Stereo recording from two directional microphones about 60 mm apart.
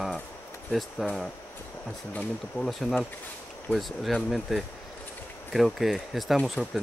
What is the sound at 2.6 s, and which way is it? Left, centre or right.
Speech, left.